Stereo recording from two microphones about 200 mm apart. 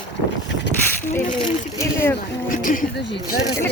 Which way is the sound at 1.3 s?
20° left (ahead or behind).